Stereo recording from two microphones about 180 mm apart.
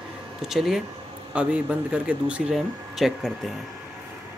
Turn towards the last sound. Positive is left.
turn(degrees=0)  # may be behind; listen again after turning